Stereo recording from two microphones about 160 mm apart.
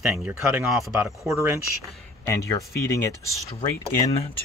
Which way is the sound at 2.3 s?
20° left (ahead or behind).